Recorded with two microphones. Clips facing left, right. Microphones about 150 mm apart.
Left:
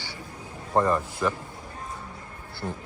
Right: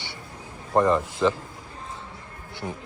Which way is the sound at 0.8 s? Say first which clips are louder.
Right 4 dB; 20° right (ahead or behind).